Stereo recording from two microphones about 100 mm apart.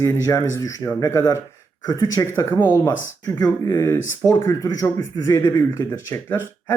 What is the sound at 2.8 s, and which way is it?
Speech, 40° left (ahead or behind).